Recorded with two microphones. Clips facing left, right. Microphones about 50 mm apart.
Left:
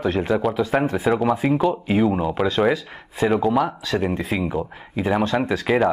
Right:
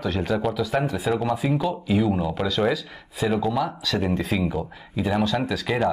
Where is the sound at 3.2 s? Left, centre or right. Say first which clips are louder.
Left 4 dB; left.